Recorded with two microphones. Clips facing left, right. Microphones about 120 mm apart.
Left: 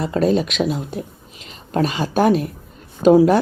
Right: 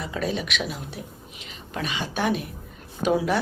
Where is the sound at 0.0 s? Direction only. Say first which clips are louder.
Left 10 dB; 40° left (ahead or behind).